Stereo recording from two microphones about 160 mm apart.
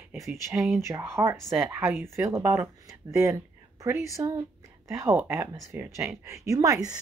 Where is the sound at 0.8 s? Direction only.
15° right (ahead or behind).